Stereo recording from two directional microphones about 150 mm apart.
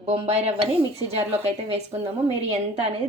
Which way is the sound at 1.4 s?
45° right (ahead or behind).